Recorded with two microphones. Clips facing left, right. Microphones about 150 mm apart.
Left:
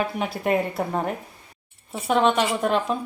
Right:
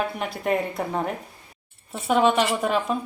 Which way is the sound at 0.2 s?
Centre (ahead or behind).